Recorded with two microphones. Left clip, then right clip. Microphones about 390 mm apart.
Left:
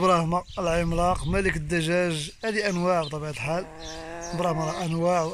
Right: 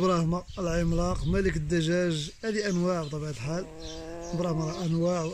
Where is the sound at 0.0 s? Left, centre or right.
Centre.